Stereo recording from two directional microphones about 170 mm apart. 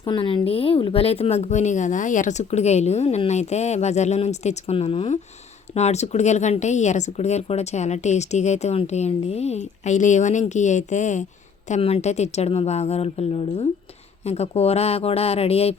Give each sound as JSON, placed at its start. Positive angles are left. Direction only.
{"t": 0.0, "sound": "speech", "side_deg": 30}